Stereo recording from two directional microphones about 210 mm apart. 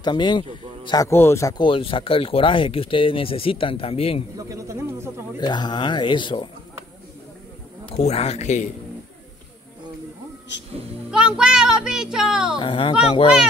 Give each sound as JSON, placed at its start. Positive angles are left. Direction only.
{"t": 0.0, "sound": "speech", "side_deg": 20}
{"t": 4.5, "sound": "speech", "side_deg": -15}
{"t": 5.4, "sound": "speech", "side_deg": 20}
{"t": 7.9, "sound": "speech", "side_deg": 30}
{"t": 11.1, "sound": "music", "side_deg": -5}
{"t": 12.5, "sound": "speech", "side_deg": 25}